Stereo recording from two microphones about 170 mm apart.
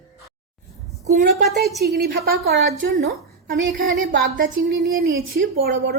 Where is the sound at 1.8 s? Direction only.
70° right (ahead or behind).